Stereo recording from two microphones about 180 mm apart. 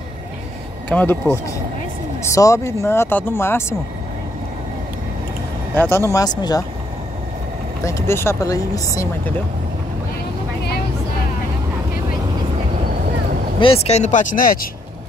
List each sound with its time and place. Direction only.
0.8 s speech: 10° left (ahead or behind)
5.8 s speech: 15° left (ahead or behind)
7.8 s speech: 15° left (ahead or behind)
13.6 s speech: 30° left (ahead or behind); by 14.7 s 50° left (ahead or behind)